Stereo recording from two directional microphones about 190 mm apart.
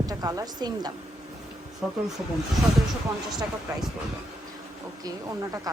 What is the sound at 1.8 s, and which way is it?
Speech, 5° right (ahead or behind).